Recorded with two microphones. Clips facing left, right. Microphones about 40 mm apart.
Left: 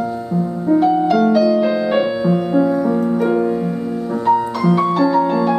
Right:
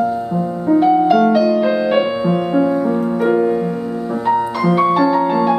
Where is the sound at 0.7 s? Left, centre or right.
Centre.